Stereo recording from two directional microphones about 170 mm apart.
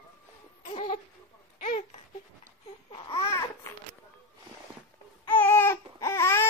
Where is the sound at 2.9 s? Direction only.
30° left (ahead or behind).